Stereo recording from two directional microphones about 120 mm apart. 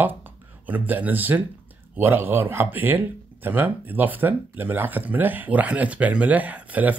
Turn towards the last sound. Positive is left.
turn(degrees=-15)  # may be behind; listen again after turning